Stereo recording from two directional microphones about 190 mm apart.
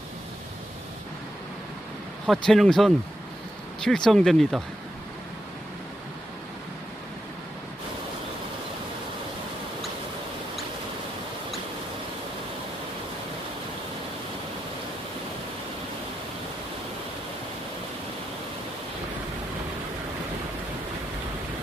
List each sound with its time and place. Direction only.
2.2 s speech: centre (ahead or behind)